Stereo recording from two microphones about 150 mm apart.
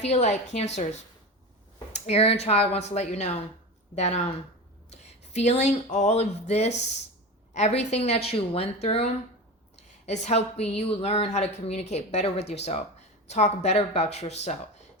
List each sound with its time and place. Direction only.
0.0 s a woman's voice: 50° left (ahead or behind)